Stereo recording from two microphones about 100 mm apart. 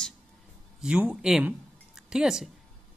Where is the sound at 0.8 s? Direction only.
10° right (ahead or behind).